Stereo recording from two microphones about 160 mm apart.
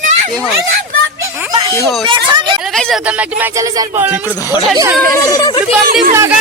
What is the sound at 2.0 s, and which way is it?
Speech, 30° right (ahead or behind).